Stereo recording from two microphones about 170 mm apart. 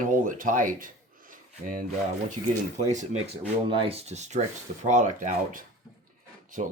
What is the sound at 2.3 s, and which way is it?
Speech, 45° right (ahead or behind).